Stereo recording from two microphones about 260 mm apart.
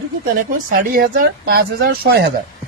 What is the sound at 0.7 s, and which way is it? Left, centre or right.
Speech, right.